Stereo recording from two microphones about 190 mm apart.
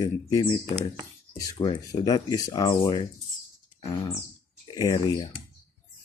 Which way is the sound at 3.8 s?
25° left (ahead or behind).